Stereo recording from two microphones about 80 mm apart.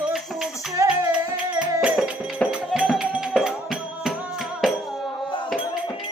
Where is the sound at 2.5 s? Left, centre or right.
Centre.